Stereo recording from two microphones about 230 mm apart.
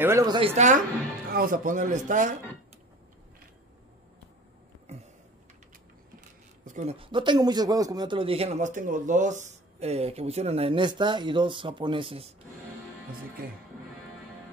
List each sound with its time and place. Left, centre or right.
0.0 s speech: centre; by 2.3 s right
6.6 s speech: right